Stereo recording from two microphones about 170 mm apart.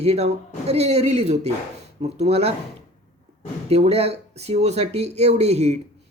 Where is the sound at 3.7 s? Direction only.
40° right (ahead or behind).